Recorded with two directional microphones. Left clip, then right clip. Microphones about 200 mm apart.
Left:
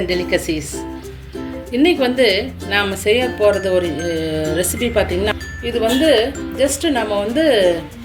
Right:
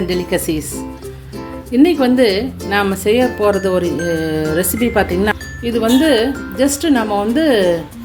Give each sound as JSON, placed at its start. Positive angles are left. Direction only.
{"t": 0.1, "sound": "speech", "side_deg": -45}